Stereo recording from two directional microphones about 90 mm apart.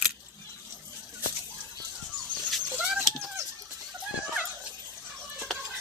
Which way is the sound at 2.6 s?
10° right (ahead or behind).